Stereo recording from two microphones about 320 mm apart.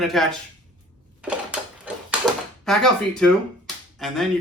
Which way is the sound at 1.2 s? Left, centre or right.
Centre.